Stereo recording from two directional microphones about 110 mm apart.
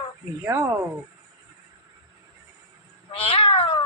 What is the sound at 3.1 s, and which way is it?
Cat, 55° left (ahead or behind).